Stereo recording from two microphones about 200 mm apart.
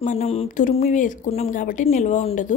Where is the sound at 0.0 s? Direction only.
35° left (ahead or behind).